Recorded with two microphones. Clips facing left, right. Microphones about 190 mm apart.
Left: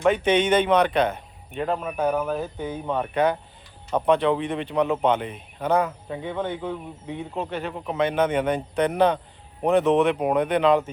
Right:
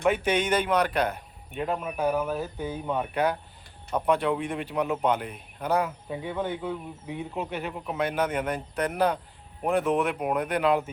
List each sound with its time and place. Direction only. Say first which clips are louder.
0.0 s speech: left 4 dB; 5° right (ahead or behind)